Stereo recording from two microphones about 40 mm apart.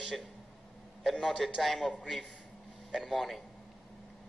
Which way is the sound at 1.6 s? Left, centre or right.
Centre.